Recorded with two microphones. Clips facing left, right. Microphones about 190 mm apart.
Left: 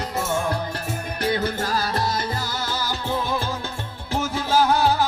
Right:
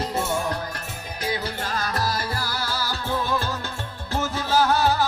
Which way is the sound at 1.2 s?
55° left (ahead or behind).